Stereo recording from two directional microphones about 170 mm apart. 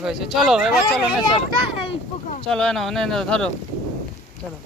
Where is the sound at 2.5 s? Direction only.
5° left (ahead or behind).